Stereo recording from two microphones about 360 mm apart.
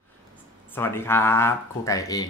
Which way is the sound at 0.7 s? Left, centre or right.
Centre.